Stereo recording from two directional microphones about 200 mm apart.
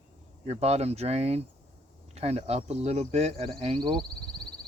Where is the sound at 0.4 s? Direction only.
35° right (ahead or behind).